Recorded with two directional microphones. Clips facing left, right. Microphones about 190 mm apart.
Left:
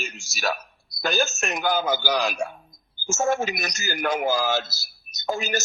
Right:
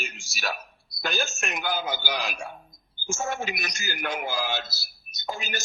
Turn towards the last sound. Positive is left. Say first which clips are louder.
# left 7 dB
turn(degrees=45)  # may be behind; listen again after turning